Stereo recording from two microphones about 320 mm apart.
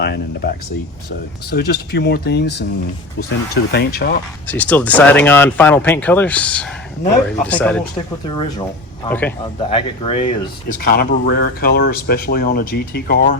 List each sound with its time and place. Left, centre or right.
0.0 s speech: left
4.4 s speech: centre
9.0 s speech: centre
9.6 s speech: centre
10.7 s speech: left